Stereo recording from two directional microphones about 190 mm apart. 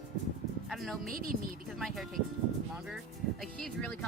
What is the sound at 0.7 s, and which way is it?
Music, centre (ahead or behind).